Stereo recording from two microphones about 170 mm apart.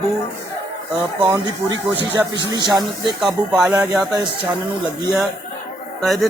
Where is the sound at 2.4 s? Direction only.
25° right (ahead or behind).